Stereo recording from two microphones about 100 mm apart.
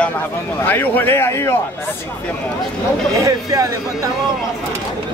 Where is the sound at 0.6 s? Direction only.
20° left (ahead or behind).